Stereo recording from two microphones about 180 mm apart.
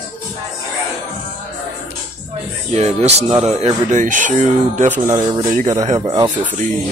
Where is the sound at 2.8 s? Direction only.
35° right (ahead or behind).